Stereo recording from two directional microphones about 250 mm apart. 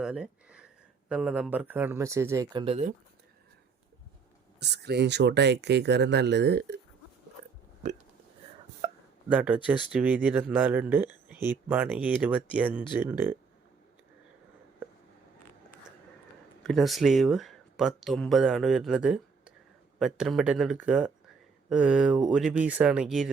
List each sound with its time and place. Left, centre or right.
0.0 s speech: centre; by 2.9 s right
4.6 s speech: right
7.8 s speech: right
9.3 s speech: centre
16.6 s speech: centre